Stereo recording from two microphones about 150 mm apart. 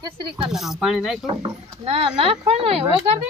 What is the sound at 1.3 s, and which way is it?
Speech, 35° right (ahead or behind).